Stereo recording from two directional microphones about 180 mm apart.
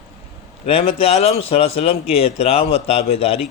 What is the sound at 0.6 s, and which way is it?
Speech, 35° left (ahead or behind).